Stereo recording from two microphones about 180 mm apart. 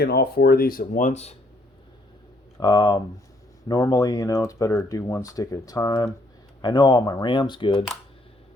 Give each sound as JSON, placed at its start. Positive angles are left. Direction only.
{"t": 0.0, "sound": "speech", "side_deg": 60}
{"t": 2.6, "sound": "speech", "side_deg": 20}